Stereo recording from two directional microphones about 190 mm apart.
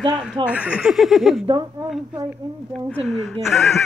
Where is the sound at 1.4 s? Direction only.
25° right (ahead or behind).